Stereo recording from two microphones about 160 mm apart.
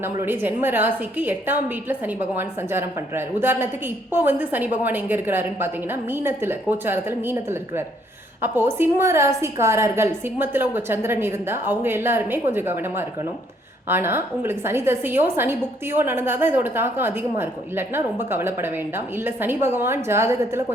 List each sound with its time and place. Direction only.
0.0 s a woman's voice: 15° right (ahead or behind)